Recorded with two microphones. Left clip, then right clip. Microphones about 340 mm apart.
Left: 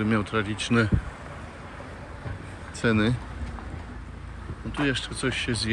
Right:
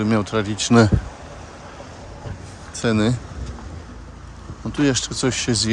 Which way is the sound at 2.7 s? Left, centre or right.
Centre.